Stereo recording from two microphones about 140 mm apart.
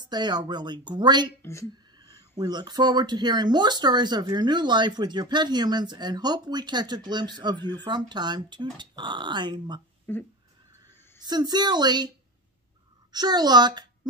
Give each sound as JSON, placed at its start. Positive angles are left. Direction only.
{"t": 0.0, "sound": "speech", "side_deg": -30}
{"t": 1.4, "sound": "a woman's voice", "side_deg": 20}
{"t": 2.0, "sound": "speech", "side_deg": -30}
{"t": 11.2, "sound": "speech", "side_deg": -30}
{"t": 13.1, "sound": "a woman's voice", "side_deg": -30}